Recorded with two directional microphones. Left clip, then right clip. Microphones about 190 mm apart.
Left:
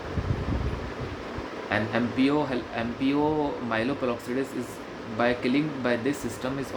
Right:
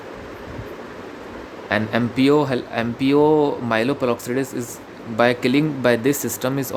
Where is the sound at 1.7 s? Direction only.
60° right (ahead or behind).